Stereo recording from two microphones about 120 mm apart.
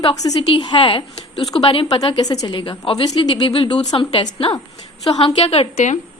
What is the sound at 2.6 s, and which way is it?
A woman's voice, 45° left (ahead or behind).